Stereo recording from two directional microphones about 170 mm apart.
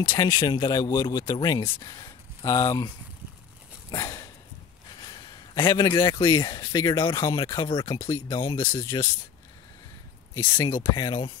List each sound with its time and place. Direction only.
0.2 s speech: 20° left (ahead or behind)
3.9 s dog: 20° left (ahead or behind)
5.0 s speech: 25° left (ahead or behind)
10.3 s speech: 20° left (ahead or behind)